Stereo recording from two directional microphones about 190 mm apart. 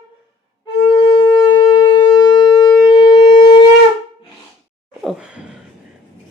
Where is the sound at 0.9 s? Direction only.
25° left (ahead or behind).